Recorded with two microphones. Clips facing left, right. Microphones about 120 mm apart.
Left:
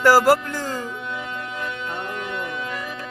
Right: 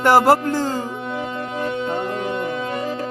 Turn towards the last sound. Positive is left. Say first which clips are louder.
# right 6 dB
turn(degrees=-35)  # may be behind; listen again after turning